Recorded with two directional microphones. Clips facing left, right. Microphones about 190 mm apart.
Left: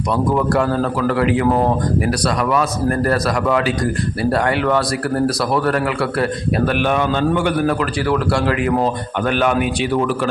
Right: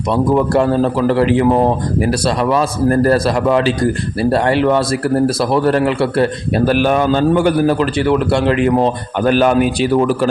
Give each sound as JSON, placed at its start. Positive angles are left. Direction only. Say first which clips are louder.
{"t": 0.1, "sound": "a man's voice", "louder": "right 4 dB", "side_deg": -25}
{"t": 6.7, "sound": "a man's voice", "louder": "right 6 dB", "side_deg": -35}